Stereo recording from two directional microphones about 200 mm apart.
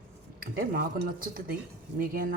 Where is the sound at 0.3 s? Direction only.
45° right (ahead or behind).